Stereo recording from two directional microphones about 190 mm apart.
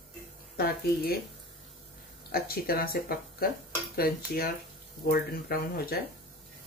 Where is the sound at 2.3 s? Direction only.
50° left (ahead or behind).